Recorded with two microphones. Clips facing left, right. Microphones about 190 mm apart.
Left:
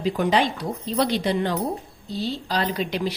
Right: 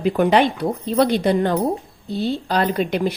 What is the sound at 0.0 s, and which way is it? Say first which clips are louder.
A woman's voice: right 5 dB; 60° right (ahead or behind).